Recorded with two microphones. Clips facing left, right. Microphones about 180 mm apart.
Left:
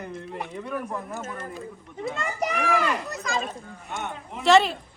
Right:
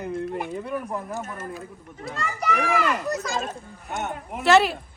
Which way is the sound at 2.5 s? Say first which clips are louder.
Right 3 dB; 40° right (ahead or behind).